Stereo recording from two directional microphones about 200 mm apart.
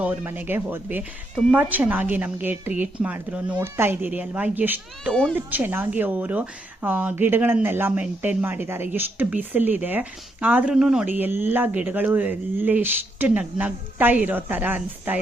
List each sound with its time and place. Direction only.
0.0 s a woman's voice: 10° right (ahead or behind)